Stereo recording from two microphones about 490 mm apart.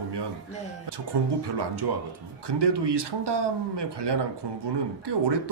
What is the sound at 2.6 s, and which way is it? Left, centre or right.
Speech, right.